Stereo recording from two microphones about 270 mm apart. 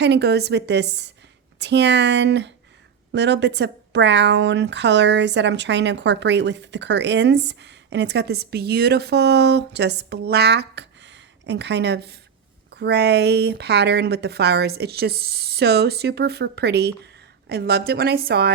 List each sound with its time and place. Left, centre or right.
0.0 s speech: right